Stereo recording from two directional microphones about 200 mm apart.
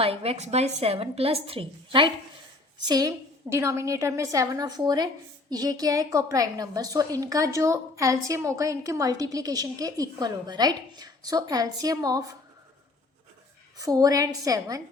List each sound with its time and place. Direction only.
0.0 s a woman's voice: 30° right (ahead or behind)
13.7 s a woman's voice: 20° right (ahead or behind)